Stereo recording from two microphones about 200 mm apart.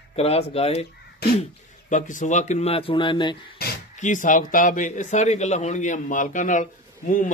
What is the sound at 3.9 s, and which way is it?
A man's voice, 40° left (ahead or behind).